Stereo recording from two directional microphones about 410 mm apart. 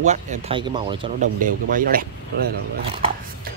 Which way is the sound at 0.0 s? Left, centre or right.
Centre.